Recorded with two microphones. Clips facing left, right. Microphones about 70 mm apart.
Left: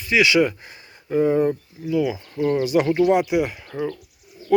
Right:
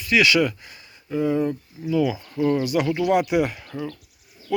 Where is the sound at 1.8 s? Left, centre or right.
Centre.